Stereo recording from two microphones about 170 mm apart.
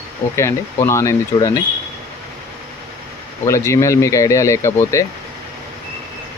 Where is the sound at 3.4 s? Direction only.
15° left (ahead or behind).